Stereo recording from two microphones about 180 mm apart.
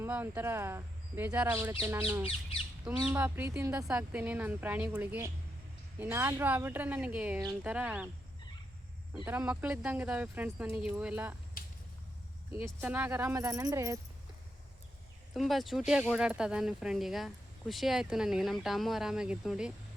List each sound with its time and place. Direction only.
0.0 s speech: 10° right (ahead or behind)
9.2 s speech: 10° right (ahead or behind)
12.5 s speech: 10° right (ahead or behind)
15.3 s speech: centre (ahead or behind)